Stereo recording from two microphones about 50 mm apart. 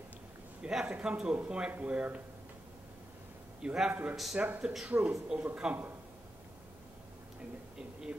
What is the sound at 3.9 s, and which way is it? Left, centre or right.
Speech, right.